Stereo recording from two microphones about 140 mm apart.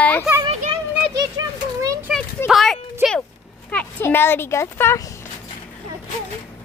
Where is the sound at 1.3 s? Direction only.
25° right (ahead or behind).